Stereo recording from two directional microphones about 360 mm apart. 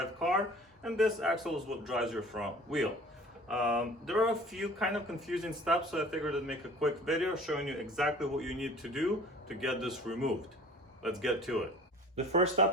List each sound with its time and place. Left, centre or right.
0.8 s speech: centre
12.1 s speech: centre